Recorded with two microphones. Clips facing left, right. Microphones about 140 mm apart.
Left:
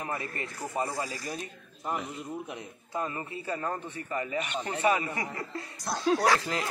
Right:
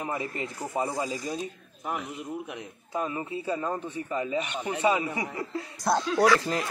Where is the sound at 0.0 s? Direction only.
15° right (ahead or behind).